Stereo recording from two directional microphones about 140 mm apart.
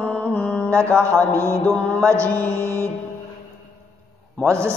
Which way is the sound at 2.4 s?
20° right (ahead or behind).